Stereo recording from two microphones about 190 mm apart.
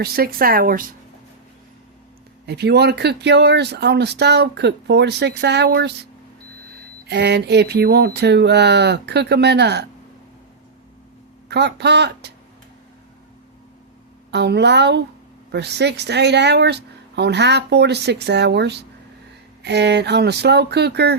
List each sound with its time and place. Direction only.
0.0 s speech: 50° right (ahead or behind)
2.5 s speech: 60° right (ahead or behind)
7.1 s speech: 60° right (ahead or behind)
11.4 s speech: 60° right (ahead or behind)
14.3 s speech: 60° right (ahead or behind)